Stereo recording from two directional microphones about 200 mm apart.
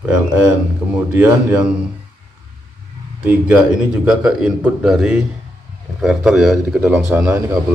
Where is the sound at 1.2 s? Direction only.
10° right (ahead or behind).